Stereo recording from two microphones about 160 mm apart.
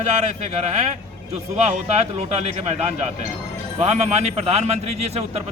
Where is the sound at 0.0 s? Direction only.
45° right (ahead or behind).